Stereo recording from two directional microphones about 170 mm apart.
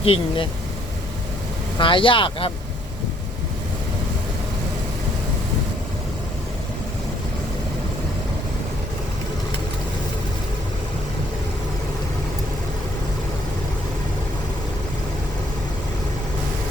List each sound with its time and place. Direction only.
0.0 s speech: 35° left (ahead or behind)
1.8 s speech: 30° left (ahead or behind)